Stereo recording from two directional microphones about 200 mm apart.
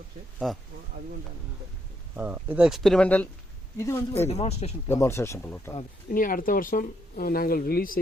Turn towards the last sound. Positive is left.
turn(degrees=45)  # may be behind; listen again after turning